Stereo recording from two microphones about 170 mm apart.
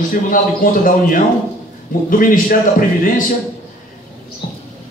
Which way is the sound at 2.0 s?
55° left (ahead or behind).